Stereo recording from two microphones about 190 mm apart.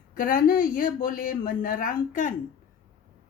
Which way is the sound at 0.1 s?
45° left (ahead or behind).